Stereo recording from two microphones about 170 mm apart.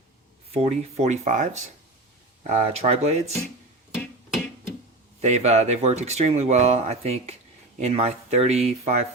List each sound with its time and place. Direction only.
0.5 s speech: 35° right (ahead or behind)
3.9 s music: centre (ahead or behind)
5.2 s speech: 40° right (ahead or behind)